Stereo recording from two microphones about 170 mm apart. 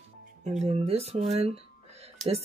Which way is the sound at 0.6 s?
35° right (ahead or behind).